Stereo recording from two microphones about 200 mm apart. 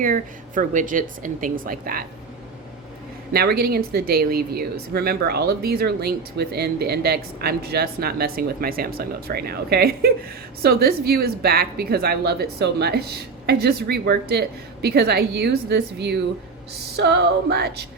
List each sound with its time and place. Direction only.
0.0 s a woman's voice: 40° right (ahead or behind)
3.3 s speech: 50° right (ahead or behind)
17.0 s female singing: 60° right (ahead or behind)